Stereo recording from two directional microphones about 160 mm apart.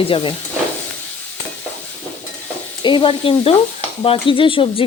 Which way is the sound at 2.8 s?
30° left (ahead or behind).